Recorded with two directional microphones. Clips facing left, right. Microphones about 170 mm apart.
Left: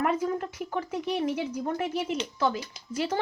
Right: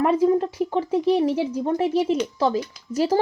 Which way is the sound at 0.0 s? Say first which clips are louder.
Right 9 dB; 30° right (ahead or behind).